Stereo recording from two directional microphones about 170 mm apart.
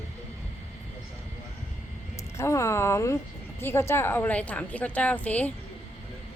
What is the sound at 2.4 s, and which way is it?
Speech, 15° left (ahead or behind).